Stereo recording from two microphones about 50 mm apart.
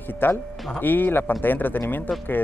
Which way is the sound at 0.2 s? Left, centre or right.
Left.